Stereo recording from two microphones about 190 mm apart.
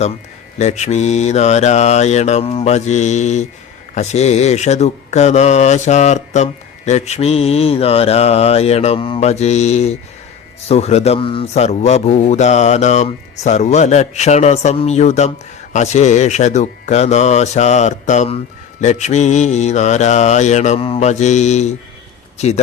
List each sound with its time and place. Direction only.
0.6 s a man's voice: 35° left (ahead or behind)